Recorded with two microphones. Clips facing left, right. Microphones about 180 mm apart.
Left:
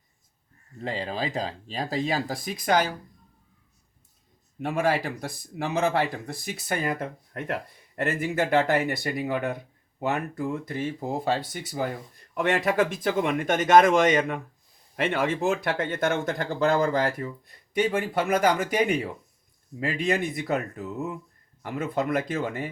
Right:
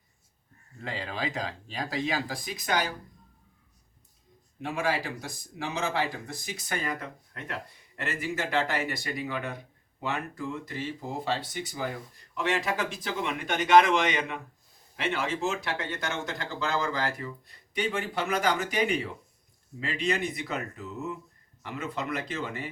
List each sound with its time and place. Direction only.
0.8 s speech: 35° left (ahead or behind)
4.6 s speech: 55° left (ahead or behind)